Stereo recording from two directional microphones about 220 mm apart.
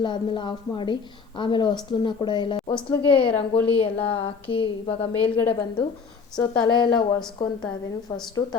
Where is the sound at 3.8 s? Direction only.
25° left (ahead or behind).